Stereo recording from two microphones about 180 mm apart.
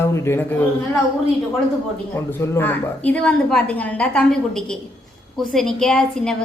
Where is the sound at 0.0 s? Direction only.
15° left (ahead or behind).